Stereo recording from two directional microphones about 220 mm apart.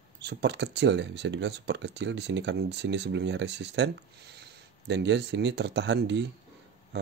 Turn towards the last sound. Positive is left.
turn(degrees=-55)  # may be behind; listen again after turning